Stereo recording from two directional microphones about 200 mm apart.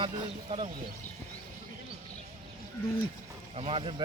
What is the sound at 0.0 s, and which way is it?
Speech, 30° right (ahead or behind).